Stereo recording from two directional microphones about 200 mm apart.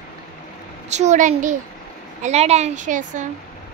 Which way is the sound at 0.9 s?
35° right (ahead or behind).